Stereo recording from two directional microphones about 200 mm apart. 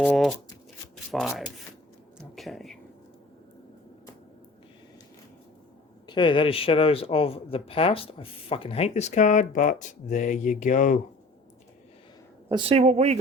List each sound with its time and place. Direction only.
0.0 s speech: centre (ahead or behind)
6.1 s speech: 25° left (ahead or behind); by 11.0 s 40° left (ahead or behind)
12.5 s speech: 25° right (ahead or behind)